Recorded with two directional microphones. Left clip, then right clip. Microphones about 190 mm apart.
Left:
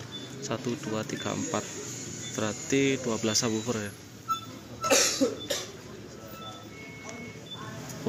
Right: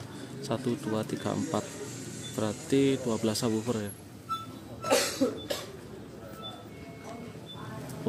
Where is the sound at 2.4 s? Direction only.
15° right (ahead or behind).